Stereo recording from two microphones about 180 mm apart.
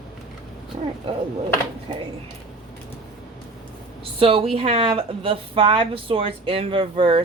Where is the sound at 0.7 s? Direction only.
40° right (ahead or behind).